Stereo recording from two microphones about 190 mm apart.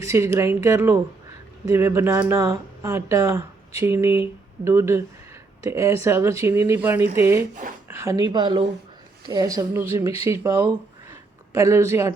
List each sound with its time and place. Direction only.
0.0 s speech: 15° right (ahead or behind)